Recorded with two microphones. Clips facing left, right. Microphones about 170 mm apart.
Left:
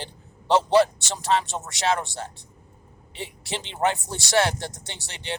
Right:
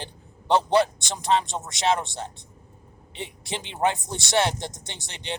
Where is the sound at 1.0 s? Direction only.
15° right (ahead or behind).